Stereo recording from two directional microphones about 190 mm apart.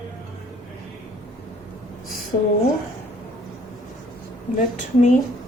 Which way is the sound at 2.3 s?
55° left (ahead or behind).